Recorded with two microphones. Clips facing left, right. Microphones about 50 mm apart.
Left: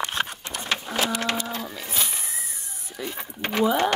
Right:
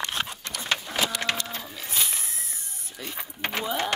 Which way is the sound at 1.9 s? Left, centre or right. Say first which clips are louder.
Right 2 dB; centre.